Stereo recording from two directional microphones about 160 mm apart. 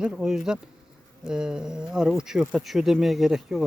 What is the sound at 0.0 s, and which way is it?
Speech, 5° right (ahead or behind).